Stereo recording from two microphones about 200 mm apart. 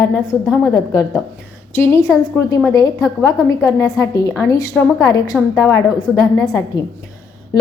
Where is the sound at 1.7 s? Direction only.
10° left (ahead or behind).